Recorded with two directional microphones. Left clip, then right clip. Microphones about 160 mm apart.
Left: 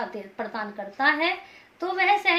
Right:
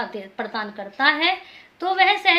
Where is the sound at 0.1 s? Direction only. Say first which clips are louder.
Right 4 dB; 25° right (ahead or behind).